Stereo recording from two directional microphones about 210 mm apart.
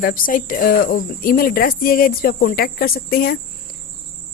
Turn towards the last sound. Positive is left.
turn(degrees=45)  # may be behind; listen again after turning